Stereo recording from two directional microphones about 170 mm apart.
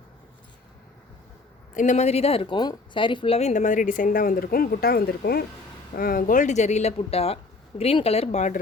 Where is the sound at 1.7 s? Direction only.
50° left (ahead or behind); by 5.4 s 70° left (ahead or behind).